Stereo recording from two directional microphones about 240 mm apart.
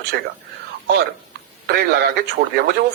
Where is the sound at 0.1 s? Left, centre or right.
Right.